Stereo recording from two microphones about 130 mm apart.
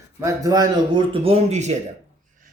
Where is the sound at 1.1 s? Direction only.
50° right (ahead or behind).